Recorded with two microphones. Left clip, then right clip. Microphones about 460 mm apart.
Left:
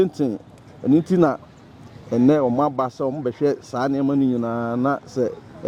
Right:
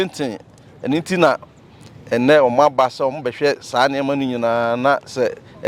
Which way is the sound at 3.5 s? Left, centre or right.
Right.